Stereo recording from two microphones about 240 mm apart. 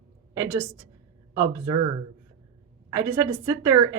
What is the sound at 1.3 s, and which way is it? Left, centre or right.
Speech, centre.